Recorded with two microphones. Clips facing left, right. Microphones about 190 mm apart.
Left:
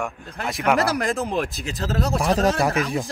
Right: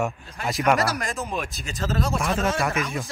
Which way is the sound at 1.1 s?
35° left (ahead or behind).